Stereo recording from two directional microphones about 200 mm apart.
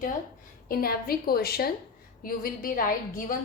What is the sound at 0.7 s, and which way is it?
A woman's voice, 50° left (ahead or behind).